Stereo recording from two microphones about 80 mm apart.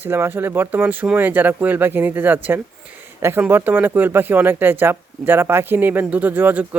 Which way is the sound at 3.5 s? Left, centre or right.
Right.